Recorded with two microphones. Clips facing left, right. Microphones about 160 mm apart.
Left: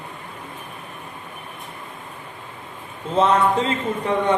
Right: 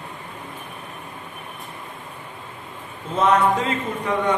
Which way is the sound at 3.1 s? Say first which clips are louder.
Left 1 dB; 30° left (ahead or behind).